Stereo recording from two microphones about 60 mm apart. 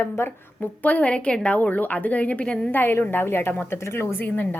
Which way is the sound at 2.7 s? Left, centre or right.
Left.